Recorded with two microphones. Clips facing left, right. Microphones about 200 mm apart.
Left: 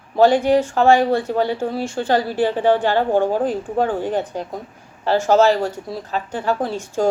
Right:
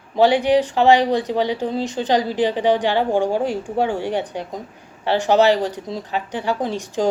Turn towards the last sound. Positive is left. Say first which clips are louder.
# even
turn(degrees=-15)  # may be behind; listen again after turning